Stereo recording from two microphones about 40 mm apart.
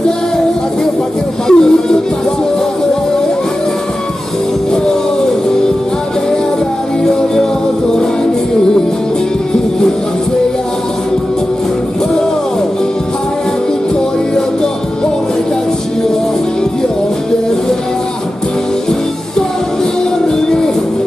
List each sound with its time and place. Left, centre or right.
1.5 s music: centre